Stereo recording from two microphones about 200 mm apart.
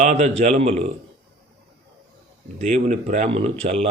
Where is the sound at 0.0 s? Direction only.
35° right (ahead or behind).